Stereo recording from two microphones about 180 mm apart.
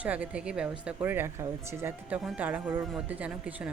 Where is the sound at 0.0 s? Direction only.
10° right (ahead or behind).